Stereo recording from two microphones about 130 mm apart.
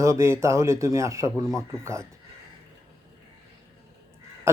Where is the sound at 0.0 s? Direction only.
25° right (ahead or behind).